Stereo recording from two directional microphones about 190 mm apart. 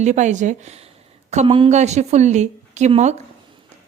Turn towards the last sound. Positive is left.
turn(degrees=-40)  # may be behind; listen again after turning